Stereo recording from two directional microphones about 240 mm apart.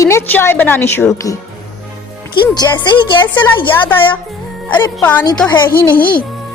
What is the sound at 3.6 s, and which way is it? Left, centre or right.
Music, centre.